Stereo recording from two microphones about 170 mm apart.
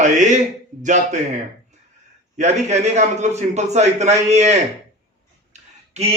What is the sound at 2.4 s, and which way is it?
A man's voice, 40° right (ahead or behind).